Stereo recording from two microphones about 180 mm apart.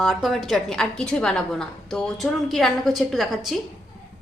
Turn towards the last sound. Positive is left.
turn(degrees=0)  # may be behind; listen again after turning